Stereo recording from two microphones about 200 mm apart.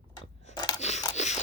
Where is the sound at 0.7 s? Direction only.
35° left (ahead or behind).